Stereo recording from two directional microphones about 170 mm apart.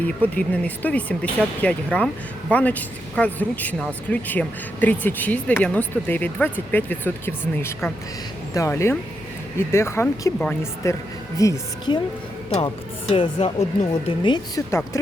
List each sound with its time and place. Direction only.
0.0 s speech: 10° left (ahead or behind)
12.6 s speech: 30° left (ahead or behind)